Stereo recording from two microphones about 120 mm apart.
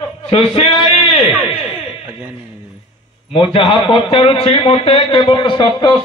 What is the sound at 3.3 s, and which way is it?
A man's voice, 45° left (ahead or behind).